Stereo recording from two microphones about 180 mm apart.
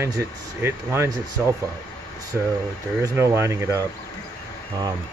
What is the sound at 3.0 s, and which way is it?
Speech, 15° right (ahead or behind).